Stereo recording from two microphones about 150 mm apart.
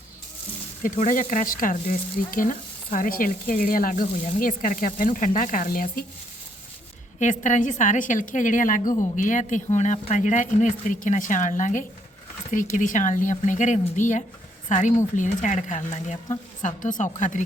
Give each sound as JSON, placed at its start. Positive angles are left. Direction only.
{"t": 0.8, "sound": "a woman's voice", "side_deg": 60}
{"t": 7.2, "sound": "a woman's voice", "side_deg": 55}